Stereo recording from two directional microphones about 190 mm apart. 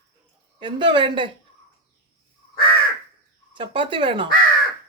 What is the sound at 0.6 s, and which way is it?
Speech, 25° right (ahead or behind).